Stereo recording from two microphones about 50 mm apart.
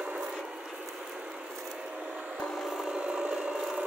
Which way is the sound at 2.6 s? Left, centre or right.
Centre.